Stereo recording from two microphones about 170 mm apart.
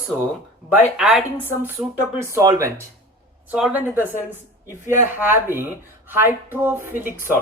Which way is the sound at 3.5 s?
5° right (ahead or behind).